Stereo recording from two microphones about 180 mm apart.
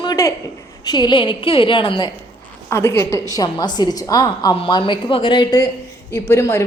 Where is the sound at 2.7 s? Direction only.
15° left (ahead or behind).